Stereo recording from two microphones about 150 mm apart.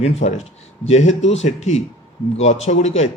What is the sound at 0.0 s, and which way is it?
Speech, 50° left (ahead or behind).